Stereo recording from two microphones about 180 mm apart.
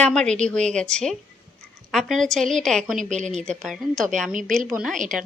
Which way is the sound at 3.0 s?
40° right (ahead or behind).